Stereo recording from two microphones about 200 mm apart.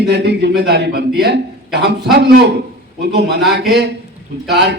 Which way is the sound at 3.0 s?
55° right (ahead or behind).